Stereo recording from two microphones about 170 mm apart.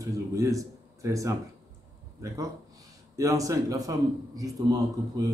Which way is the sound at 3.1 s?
20° right (ahead or behind).